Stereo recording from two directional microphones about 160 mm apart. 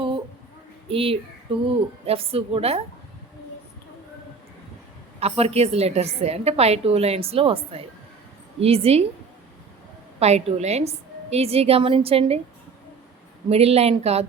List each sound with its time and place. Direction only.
0.9 s a woman's voice: 35° right (ahead or behind)
5.2 s a woman's voice: 40° right (ahead or behind)
10.2 s a woman's voice: 40° right (ahead or behind)
13.5 s a woman's voice: 40° right (ahead or behind)